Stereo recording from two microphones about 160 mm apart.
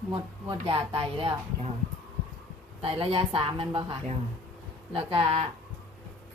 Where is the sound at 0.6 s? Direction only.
35° right (ahead or behind).